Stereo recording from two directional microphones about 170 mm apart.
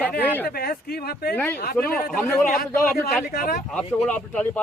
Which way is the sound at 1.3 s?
10° left (ahead or behind).